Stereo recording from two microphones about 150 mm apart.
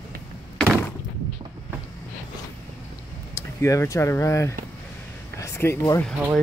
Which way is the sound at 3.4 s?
20° left (ahead or behind).